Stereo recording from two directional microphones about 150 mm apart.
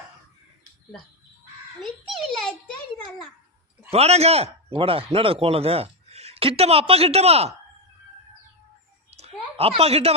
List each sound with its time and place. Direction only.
1.8 s a child's voice: centre (ahead or behind)
3.9 s a man's voice: 45° right (ahead or behind)
9.0 s a sound: 45° right (ahead or behind)